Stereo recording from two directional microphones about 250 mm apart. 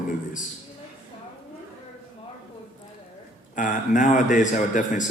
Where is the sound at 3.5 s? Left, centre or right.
Left.